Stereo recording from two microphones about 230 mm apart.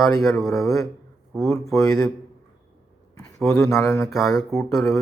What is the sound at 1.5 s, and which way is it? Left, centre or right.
Speech, centre.